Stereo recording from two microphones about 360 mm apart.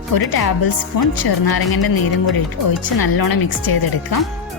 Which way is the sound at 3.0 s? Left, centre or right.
Left.